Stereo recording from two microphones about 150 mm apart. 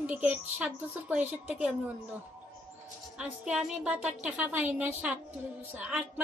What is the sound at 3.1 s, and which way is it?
A woman's voice, 5° right (ahead or behind).